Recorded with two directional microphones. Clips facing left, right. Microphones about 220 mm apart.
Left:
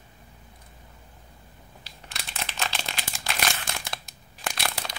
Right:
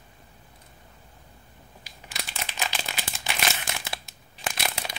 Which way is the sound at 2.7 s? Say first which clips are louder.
Even; 5° right (ahead or behind).